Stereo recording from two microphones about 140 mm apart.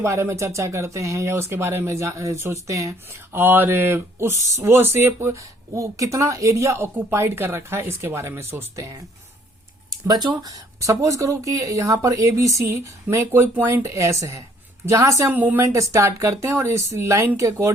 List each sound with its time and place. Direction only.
0.0 s speech: 20° right (ahead or behind)